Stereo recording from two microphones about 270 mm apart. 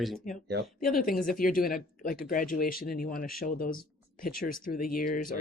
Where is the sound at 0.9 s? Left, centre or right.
Left.